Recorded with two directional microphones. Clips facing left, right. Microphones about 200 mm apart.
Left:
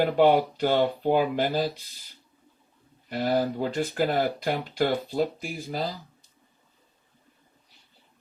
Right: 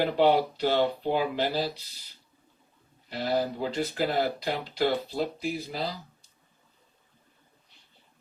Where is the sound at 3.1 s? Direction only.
50° left (ahead or behind).